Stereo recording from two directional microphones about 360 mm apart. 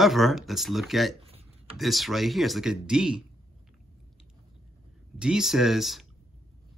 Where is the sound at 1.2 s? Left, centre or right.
Centre.